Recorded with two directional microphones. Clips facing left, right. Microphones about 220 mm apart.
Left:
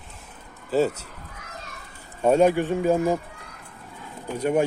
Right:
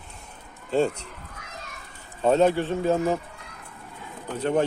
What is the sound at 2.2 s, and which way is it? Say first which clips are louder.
Speech: left 2 dB; 10° left (ahead or behind).